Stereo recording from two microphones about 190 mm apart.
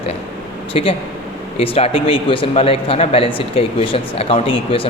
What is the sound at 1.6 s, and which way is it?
Speech, 30° left (ahead or behind).